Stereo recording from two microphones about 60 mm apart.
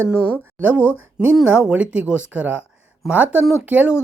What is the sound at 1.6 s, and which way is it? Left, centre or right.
Speech, centre.